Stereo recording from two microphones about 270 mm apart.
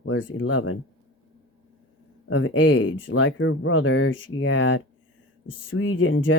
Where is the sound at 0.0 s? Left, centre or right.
Left.